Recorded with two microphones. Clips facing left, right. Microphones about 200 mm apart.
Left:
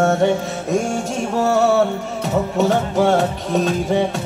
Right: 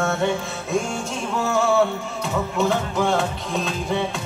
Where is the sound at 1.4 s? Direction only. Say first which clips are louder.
Left 6 dB; 40° left (ahead or behind).